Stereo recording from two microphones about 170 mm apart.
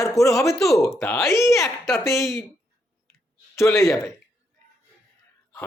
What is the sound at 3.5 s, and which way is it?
Speech, 15° left (ahead or behind).